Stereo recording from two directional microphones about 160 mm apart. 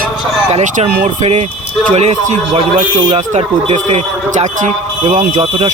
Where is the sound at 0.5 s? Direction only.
45° right (ahead or behind).